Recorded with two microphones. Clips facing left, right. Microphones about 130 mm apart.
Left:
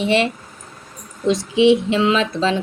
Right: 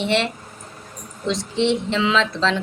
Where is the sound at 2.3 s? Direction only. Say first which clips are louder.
Left 2 dB; 50° left (ahead or behind).